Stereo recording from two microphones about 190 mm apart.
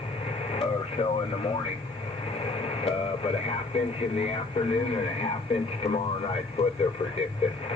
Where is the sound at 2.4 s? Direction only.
30° left (ahead or behind).